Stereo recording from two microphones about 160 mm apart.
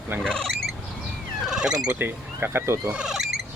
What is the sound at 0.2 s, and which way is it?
Squawk, 5° left (ahead or behind).